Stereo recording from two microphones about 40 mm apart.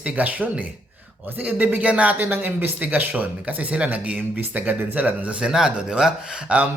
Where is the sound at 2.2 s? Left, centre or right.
Right.